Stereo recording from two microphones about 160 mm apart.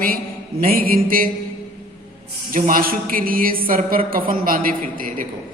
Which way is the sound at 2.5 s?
55° right (ahead or behind).